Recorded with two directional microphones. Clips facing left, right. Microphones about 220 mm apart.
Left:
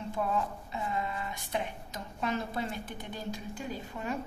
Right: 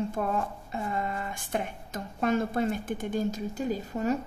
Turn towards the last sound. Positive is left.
turn(degrees=-40)  # may be behind; listen again after turning